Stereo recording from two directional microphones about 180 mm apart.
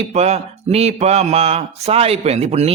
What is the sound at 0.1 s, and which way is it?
Mantra, 35° right (ahead or behind).